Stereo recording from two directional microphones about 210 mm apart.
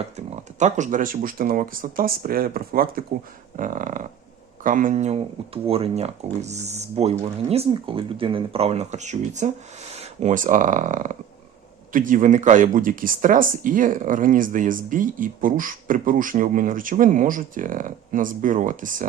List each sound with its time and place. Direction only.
0.2 s speech: 35° right (ahead or behind)